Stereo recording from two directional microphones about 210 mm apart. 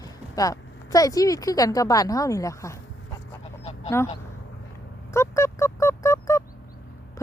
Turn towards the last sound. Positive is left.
turn(degrees=15)  # may be behind; listen again after turning